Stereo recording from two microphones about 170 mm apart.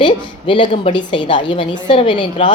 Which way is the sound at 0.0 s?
30° left (ahead or behind).